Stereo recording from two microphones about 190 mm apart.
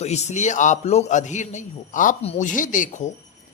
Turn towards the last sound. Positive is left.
turn(degrees=40)  # may be behind; listen again after turning